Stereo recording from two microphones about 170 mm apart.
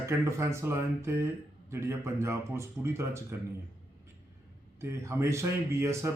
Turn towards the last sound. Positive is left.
turn(degrees=-15)  # may be behind; listen again after turning